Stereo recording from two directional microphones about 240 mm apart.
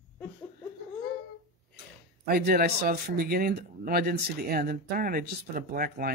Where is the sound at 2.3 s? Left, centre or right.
Right.